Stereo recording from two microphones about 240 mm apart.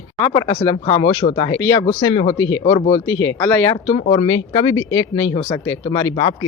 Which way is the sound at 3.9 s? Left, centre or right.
Left.